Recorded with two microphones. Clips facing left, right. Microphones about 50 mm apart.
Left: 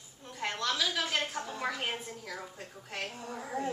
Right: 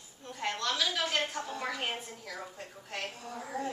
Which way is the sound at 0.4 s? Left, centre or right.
Centre.